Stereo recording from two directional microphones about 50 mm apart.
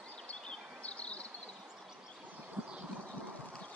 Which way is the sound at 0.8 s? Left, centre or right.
Left.